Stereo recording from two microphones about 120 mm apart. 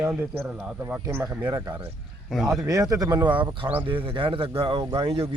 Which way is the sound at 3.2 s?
15° right (ahead or behind).